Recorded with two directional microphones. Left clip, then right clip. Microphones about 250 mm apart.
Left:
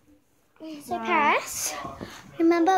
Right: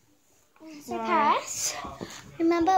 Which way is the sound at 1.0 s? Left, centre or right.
Centre.